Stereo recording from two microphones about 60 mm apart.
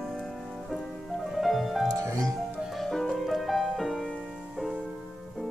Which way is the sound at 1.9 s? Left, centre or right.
Right.